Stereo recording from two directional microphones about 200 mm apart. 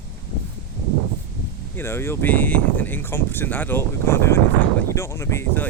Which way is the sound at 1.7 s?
10° left (ahead or behind).